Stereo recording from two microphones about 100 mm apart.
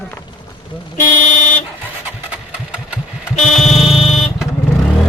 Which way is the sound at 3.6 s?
90° left.